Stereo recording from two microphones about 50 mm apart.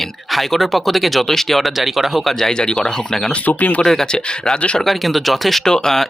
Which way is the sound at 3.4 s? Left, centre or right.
Left.